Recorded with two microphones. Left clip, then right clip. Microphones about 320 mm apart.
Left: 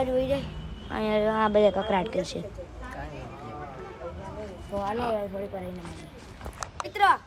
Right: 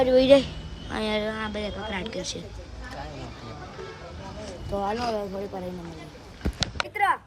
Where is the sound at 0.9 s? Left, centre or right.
Centre.